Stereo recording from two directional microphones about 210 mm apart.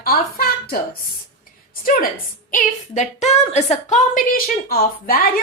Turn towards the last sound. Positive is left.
turn(degrees=45)  # may be behind; listen again after turning